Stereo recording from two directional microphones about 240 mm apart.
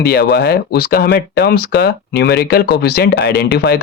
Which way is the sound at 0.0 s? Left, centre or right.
Left.